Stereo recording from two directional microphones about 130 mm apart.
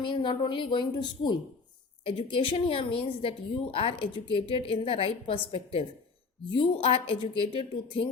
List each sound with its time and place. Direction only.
0.0 s a woman's voice: 40° left (ahead or behind)